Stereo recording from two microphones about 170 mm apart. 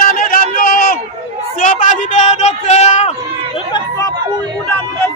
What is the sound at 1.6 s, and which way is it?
Speech, 50° left (ahead or behind).